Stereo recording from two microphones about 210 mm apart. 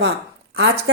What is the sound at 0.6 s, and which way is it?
Speech, 55° right (ahead or behind).